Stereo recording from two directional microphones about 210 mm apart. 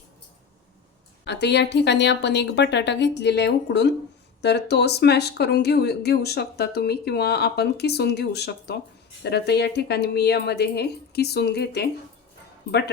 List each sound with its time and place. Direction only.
1.2 s a woman's voice: 55° left (ahead or behind)